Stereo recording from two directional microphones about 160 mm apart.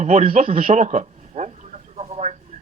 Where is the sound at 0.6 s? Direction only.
50° right (ahead or behind).